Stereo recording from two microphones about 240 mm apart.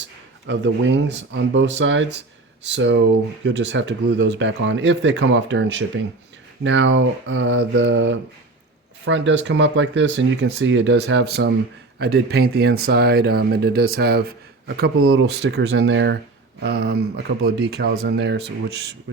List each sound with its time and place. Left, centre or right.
0.4 s speech: right
14.9 s speech: right
15.4 s speech: right